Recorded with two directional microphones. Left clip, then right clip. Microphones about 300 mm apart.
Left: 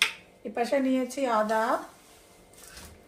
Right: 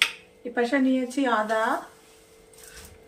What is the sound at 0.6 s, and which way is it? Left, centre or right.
Speech, left.